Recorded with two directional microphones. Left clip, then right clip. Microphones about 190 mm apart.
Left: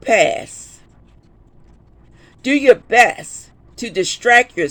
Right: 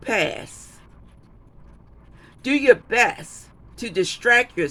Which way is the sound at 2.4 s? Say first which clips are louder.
Left 4 dB; 15° left (ahead or behind).